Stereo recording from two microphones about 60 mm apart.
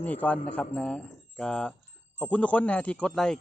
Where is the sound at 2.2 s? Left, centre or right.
Left.